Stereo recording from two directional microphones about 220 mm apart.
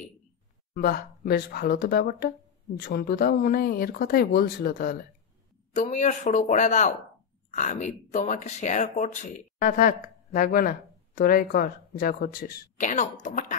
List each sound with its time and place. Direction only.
0.7 s speech: 45° left (ahead or behind)